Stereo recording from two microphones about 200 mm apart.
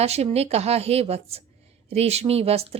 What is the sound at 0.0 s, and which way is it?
A woman's voice, 30° right (ahead or behind).